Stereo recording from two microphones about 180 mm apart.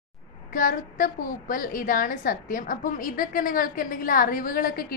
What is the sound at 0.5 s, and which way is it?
A woman's voice, 50° left (ahead or behind).